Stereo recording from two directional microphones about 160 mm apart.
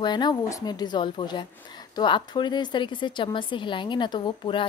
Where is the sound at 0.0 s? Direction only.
25° left (ahead or behind).